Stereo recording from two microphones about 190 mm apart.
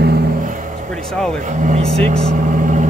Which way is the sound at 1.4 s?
40° right (ahead or behind).